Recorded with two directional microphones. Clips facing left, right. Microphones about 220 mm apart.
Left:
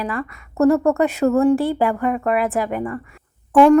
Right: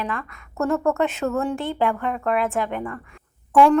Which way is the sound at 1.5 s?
Centre (ahead or behind).